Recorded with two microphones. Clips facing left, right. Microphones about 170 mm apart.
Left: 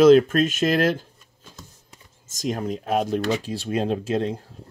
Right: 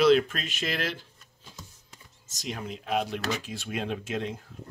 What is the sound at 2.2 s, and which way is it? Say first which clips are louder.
Speech: left 10 dB; 45° left (ahead or behind).